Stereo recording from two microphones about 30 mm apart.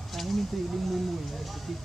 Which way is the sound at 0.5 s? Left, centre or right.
Centre.